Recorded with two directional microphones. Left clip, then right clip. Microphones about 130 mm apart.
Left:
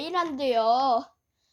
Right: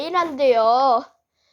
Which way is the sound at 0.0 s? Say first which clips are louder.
Right 8 dB; 30° left (ahead or behind).